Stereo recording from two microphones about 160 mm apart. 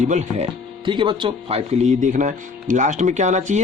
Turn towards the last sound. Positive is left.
turn(degrees=-50)  # may be behind; listen again after turning